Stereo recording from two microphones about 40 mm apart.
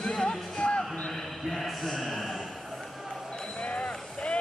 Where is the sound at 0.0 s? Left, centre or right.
Centre.